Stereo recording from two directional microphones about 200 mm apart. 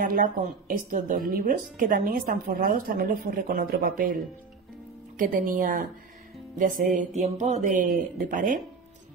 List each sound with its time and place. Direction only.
0.0 s speech: 45° right (ahead or behind)
6.6 s mantra: 40° right (ahead or behind)
8.3 s speech: 45° right (ahead or behind)